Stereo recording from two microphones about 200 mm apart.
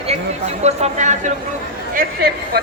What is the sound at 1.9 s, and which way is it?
Speech, 50° right (ahead or behind).